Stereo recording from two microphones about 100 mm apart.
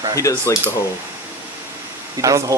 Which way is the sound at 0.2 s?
30° left (ahead or behind).